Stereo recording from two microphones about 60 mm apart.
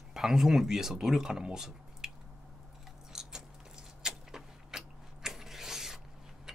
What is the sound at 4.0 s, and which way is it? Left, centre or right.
Mechanisms, centre.